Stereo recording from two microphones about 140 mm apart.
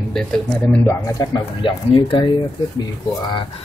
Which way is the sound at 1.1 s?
35° left (ahead or behind).